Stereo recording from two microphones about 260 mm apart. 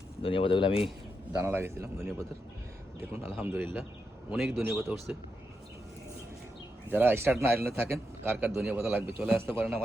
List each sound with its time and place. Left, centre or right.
0.2 s speech: left
1.4 s a man's voice: centre
6.8 s a man's voice: centre